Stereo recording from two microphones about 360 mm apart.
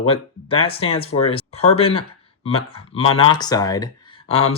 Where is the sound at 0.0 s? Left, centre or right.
Centre.